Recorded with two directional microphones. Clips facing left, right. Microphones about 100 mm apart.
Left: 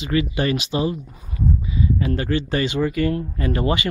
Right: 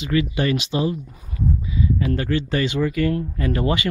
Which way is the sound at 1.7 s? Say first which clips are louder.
Even; 25° left (ahead or behind).